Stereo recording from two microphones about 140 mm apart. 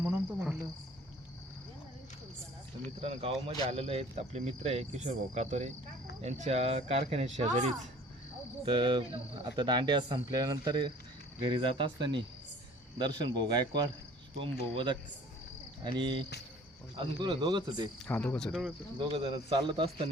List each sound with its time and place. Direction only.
0.0 s cricket: 15° right (ahead or behind)
3.0 s speech: 50° right (ahead or behind)
8.6 s speech: 35° right (ahead or behind)
18.0 s speech: 10° left (ahead or behind)
18.9 s speech: 40° right (ahead or behind)